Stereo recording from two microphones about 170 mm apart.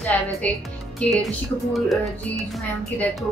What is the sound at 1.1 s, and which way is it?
A woman's voice, centre (ahead or behind).